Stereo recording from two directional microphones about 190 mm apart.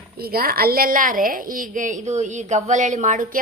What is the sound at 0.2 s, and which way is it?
A woman's voice, 50° right (ahead or behind).